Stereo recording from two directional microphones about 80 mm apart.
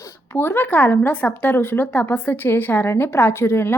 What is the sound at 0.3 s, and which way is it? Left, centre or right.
A woman's voice, left.